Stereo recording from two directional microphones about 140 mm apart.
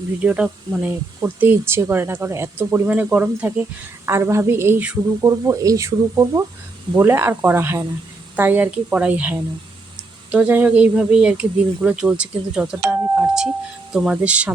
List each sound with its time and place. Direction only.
0.2 s speech: 10° right (ahead or behind)
5.2 s speech: 25° right (ahead or behind)